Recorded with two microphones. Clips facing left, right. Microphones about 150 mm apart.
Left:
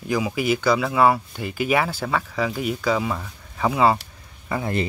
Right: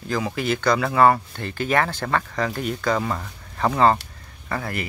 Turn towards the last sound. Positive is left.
turn(degrees=20)  # may be behind; listen again after turning